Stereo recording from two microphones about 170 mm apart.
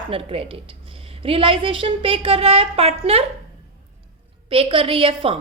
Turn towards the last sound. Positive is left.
turn(degrees=-30)  # may be behind; listen again after turning